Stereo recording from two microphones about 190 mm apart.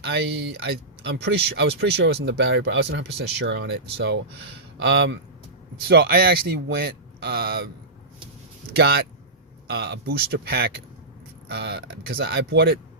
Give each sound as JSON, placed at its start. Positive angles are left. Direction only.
{"t": 0.0, "sound": "speech", "side_deg": -60}
{"t": 2.2, "sound": "speech", "side_deg": -70}
{"t": 5.9, "sound": "speech", "side_deg": -55}
{"t": 8.7, "sound": "speech", "side_deg": -55}